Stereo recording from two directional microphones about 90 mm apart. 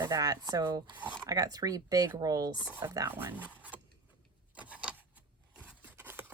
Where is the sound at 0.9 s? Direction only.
20° right (ahead or behind).